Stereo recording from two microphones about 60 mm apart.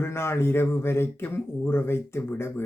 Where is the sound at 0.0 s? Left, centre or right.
Left.